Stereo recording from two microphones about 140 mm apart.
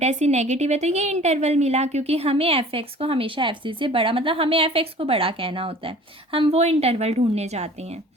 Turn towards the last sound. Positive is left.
turn(degrees=-50)  # may be behind; listen again after turning